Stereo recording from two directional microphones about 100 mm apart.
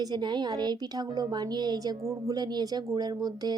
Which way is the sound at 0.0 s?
45° right (ahead or behind).